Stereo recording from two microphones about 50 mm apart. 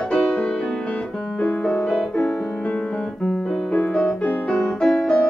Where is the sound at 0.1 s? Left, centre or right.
Left.